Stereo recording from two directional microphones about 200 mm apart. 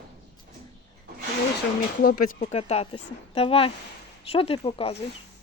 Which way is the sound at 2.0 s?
45° left (ahead or behind).